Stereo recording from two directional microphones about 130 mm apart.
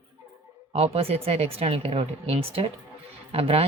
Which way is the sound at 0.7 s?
50° right (ahead or behind).